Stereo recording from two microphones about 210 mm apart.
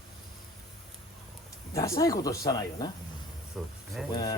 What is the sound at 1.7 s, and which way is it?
A man's voice, 15° left (ahead or behind).